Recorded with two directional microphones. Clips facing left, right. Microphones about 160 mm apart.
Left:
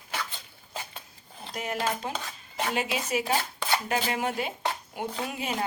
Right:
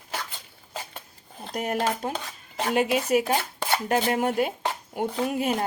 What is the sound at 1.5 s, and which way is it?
Speech, 55° right (ahead or behind).